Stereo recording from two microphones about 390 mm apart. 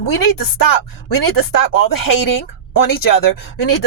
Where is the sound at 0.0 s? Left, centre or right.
Left.